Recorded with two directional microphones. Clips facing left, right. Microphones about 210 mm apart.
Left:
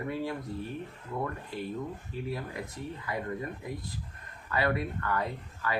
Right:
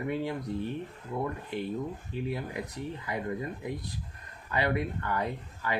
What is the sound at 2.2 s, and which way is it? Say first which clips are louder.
Speech: right 2 dB; 20° right (ahead or behind).